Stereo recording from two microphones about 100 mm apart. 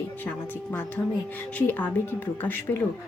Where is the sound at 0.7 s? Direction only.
15° left (ahead or behind).